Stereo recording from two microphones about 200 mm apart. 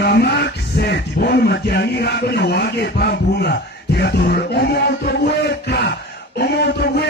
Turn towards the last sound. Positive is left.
turn(degrees=55)  # may be behind; listen again after turning